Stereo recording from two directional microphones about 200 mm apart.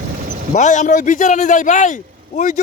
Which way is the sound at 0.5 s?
40° left (ahead or behind).